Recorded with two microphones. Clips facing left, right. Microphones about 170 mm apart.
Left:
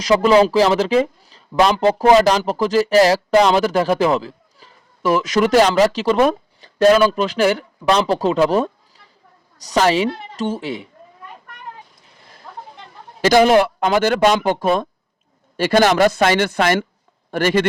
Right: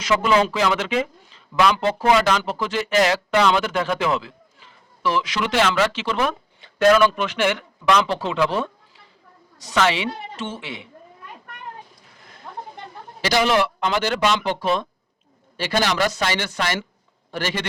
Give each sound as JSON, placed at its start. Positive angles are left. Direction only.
{"t": 0.0, "sound": "speech", "side_deg": 35}
{"t": 13.2, "sound": "a man's voice", "side_deg": 50}